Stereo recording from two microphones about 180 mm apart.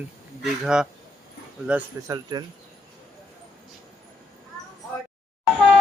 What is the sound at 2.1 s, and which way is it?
Speech, 25° right (ahead or behind).